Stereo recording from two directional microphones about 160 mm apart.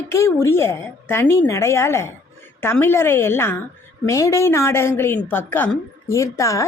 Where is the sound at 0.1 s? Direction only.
15° left (ahead or behind).